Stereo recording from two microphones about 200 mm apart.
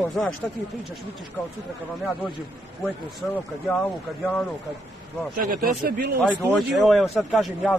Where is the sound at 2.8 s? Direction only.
5° left (ahead or behind).